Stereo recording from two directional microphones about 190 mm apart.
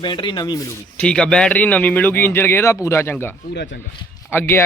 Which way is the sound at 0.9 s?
5° left (ahead or behind).